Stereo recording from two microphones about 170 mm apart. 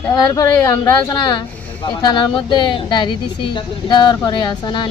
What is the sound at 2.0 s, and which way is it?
A woman's voice, 25° left (ahead or behind).